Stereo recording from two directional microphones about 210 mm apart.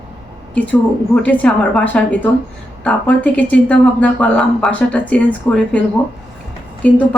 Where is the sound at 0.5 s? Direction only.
5° left (ahead or behind).